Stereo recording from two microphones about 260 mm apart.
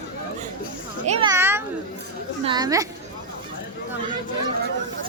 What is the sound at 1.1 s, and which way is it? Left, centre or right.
A child's voice, centre.